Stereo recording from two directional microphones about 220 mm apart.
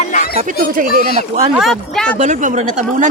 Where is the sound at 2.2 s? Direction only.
35° right (ahead or behind).